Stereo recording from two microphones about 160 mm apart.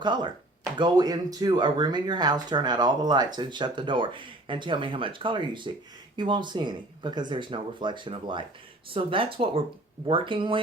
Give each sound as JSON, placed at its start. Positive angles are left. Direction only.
{"t": 0.0, "sound": "speech", "side_deg": -30}